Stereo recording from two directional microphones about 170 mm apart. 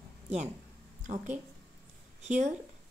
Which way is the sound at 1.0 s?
45° right (ahead or behind).